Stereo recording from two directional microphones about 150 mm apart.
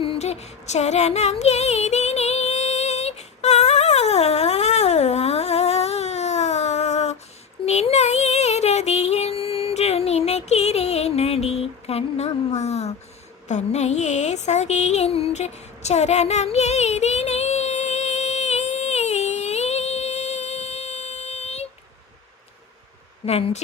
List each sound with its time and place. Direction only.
0.0 s a sound: 40° left (ahead or behind)
7.6 s child singing: 45° left (ahead or behind)
13.5 s music: 50° left (ahead or behind)
23.2 s speech: 45° left (ahead or behind)